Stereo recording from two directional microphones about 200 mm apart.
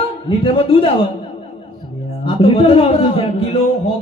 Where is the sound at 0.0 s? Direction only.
25° left (ahead or behind).